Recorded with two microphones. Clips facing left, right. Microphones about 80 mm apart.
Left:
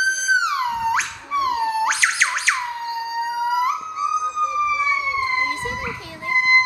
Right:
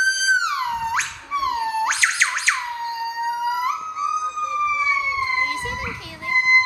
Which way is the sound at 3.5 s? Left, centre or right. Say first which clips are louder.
Left 2 dB; centre.